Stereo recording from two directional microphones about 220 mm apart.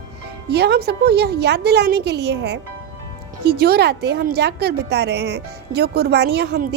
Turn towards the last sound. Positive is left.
turn(degrees=-45)  # may be behind; listen again after turning